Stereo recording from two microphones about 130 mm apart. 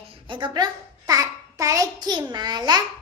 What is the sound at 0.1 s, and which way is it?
Babbling, 40° right (ahead or behind).